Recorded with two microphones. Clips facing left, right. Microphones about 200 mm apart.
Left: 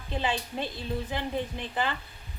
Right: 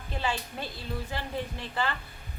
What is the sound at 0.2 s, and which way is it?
A woman's voice, 20° left (ahead or behind).